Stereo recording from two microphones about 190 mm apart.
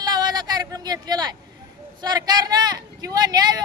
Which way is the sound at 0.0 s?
20° right (ahead or behind).